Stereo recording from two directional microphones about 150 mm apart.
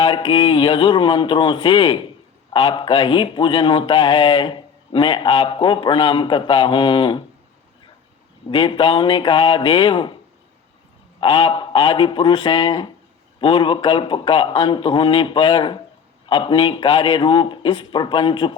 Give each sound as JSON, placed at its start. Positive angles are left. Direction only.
{"t": 0.0, "sound": "speech", "side_deg": 35}
{"t": 8.4, "sound": "speech", "side_deg": 35}
{"t": 11.2, "sound": "speech", "side_deg": 35}